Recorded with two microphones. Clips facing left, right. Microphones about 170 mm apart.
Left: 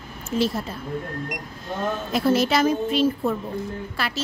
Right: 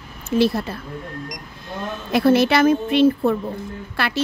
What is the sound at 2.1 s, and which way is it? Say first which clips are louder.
A woman's voice: right 6 dB; 65° right (ahead or behind).